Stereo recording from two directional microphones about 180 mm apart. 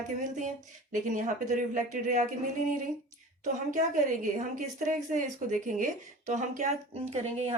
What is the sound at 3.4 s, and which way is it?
A woman's voice, 45° right (ahead or behind).